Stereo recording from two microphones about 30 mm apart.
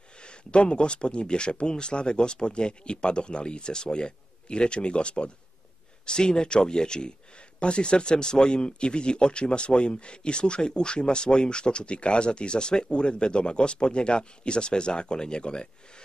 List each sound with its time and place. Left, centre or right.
0.2 s speech: left